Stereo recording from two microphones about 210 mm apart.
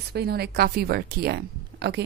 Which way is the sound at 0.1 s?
50° right (ahead or behind).